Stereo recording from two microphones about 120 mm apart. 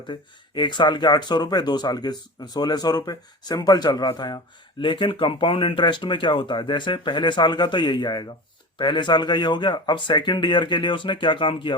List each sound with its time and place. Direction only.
0.1 s speech: 40° left (ahead or behind)